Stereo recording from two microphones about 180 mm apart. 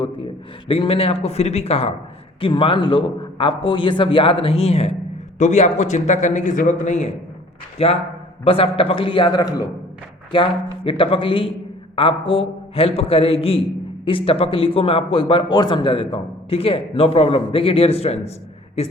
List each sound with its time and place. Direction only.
0.7 s a man's voice: 30° left (ahead or behind)